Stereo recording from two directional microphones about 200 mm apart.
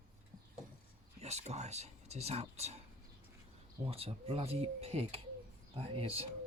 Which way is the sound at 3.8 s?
30° right (ahead or behind).